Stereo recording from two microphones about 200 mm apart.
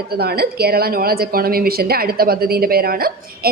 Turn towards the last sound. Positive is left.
turn(degrees=-50)  # may be behind; listen again after turning